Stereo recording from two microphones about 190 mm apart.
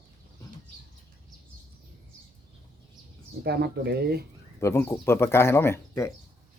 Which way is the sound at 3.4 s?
60° right (ahead or behind).